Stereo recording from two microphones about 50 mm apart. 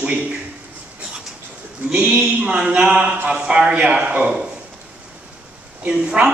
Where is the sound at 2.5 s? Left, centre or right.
Centre.